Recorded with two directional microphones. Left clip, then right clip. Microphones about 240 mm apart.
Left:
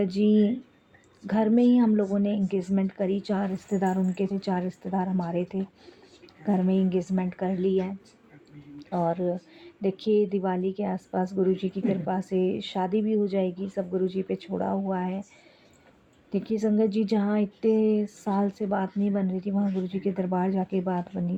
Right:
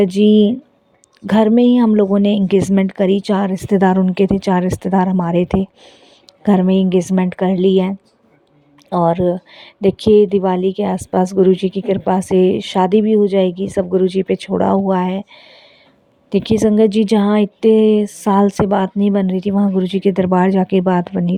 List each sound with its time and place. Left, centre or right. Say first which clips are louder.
0.0 s a woman's voice: right 12 dB; right
16.3 s a woman's voice: right 13 dB; right